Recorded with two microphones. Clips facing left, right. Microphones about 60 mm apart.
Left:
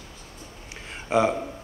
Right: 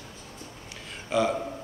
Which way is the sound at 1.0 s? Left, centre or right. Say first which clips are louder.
Left 3 dB; left.